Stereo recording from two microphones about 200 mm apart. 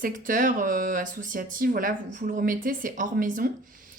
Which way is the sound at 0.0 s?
45° right (ahead or behind).